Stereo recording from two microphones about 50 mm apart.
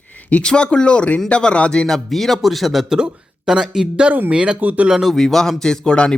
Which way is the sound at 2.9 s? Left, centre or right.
Centre.